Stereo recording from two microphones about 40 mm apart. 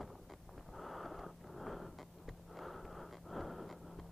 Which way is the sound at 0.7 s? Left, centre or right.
Centre.